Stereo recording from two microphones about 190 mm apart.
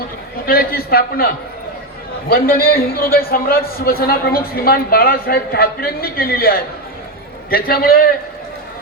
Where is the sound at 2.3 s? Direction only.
50° left (ahead or behind).